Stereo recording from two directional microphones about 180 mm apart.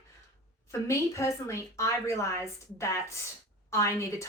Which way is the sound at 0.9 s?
15° left (ahead or behind).